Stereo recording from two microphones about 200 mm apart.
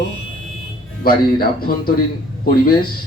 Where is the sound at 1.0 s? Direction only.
50° left (ahead or behind).